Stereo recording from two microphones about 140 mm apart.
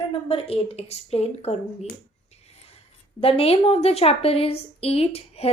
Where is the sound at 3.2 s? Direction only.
45° left (ahead or behind).